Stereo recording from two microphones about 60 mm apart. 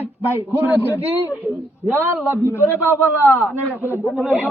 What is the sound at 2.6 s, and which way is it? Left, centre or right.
Speech, left.